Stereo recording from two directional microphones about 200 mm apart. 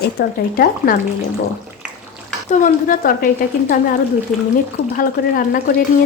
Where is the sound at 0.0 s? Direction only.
50° left (ahead or behind).